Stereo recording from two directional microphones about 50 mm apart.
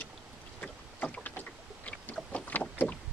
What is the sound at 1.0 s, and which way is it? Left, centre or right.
Boat, left.